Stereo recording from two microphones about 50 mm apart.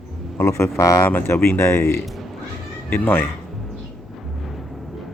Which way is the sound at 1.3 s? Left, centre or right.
Left.